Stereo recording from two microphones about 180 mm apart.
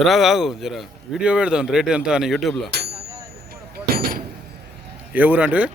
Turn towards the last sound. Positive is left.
turn(degrees=-5)  # may be behind; listen again after turning